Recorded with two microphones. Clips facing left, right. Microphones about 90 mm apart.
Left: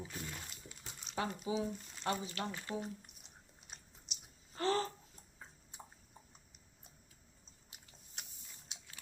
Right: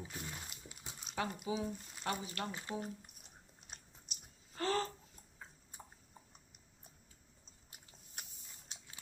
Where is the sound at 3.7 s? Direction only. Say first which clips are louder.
Right 1 dB; 5° right (ahead or behind).